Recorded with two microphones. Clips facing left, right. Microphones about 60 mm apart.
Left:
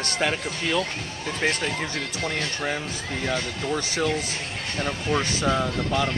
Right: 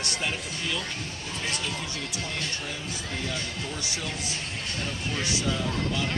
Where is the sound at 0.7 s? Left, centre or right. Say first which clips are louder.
Left 8 dB; left.